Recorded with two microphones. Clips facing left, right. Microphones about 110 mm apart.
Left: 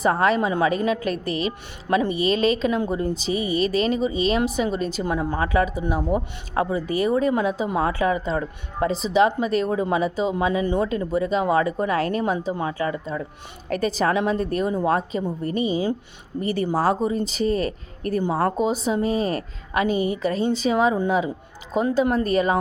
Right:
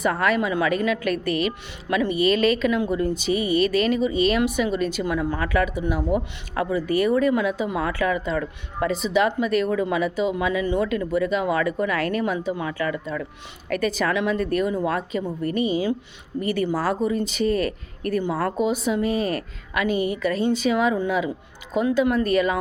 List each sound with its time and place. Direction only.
0.0 s speech: 30° left (ahead or behind)